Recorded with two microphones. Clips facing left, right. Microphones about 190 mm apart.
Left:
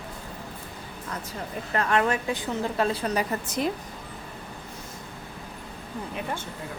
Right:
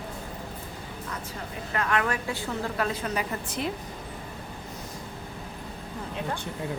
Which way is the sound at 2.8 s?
35° left (ahead or behind).